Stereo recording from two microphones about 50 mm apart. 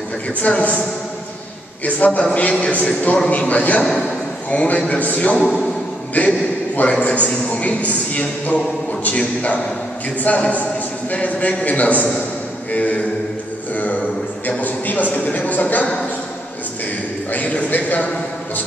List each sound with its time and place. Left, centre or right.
0.4 s a man's voice: left
1.9 s a man's voice: left
5.4 s a man's voice: centre
6.1 s a man's voice: left
14.6 s a man's voice: left
17.3 s a man's voice: left